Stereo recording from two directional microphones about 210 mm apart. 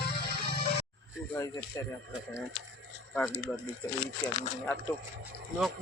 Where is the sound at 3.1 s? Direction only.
5° left (ahead or behind).